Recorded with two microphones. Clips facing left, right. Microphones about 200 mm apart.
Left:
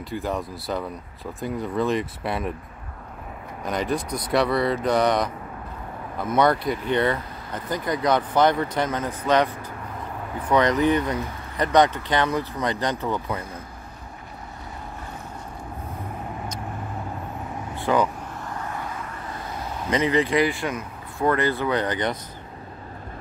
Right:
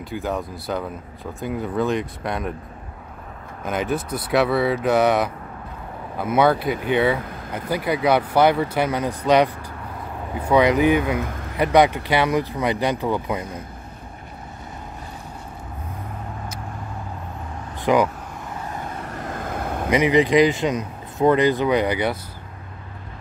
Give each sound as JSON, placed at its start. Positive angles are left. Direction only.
{"t": 0.0, "sound": "speech", "side_deg": 0}
{"t": 3.6, "sound": "speech", "side_deg": -5}
{"t": 10.5, "sound": "speech", "side_deg": -10}
{"t": 17.7, "sound": "speech", "side_deg": -15}
{"t": 19.2, "sound": "vehicle", "side_deg": -50}
{"t": 19.9, "sound": "speech", "side_deg": -15}